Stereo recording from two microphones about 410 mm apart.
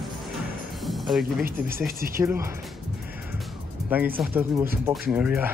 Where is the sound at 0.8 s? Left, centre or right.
Centre.